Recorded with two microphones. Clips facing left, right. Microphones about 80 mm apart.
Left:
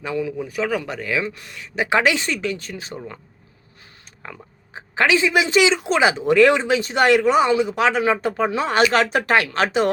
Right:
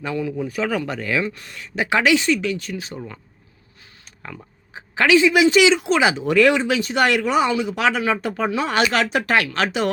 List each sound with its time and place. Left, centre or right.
0.0 s speech: centre
2.0 s speech: left
4.7 s speech: left